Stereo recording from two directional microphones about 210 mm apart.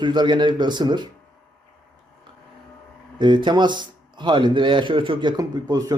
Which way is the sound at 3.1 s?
20° right (ahead or behind).